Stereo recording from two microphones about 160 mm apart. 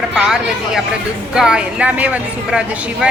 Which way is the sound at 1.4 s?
5° right (ahead or behind).